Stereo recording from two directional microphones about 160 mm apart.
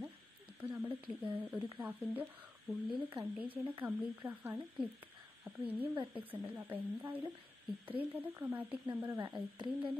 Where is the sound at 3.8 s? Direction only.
10° right (ahead or behind).